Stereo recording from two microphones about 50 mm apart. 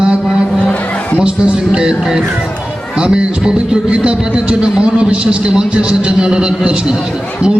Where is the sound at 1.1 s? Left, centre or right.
Centre.